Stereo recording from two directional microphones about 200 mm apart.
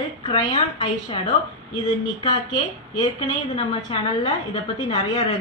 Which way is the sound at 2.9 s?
30° left (ahead or behind).